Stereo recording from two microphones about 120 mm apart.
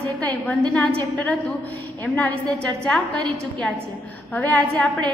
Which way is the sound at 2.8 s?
5° left (ahead or behind).